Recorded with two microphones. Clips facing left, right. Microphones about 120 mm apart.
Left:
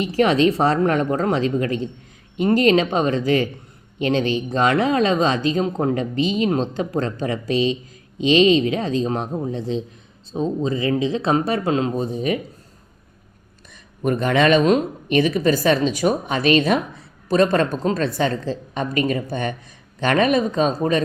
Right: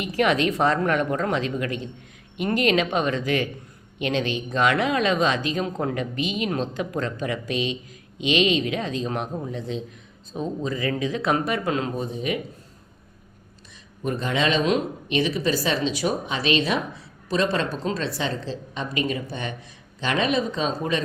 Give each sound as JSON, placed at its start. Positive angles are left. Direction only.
{"t": 0.0, "sound": "speech", "side_deg": 30}
{"t": 14.0, "sound": "a woman's voice", "side_deg": 60}